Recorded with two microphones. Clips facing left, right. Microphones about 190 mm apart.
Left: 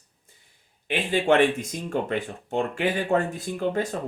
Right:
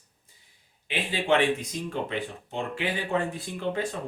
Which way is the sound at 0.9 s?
50° left (ahead or behind).